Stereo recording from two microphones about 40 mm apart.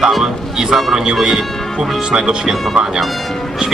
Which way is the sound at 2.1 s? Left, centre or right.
Centre.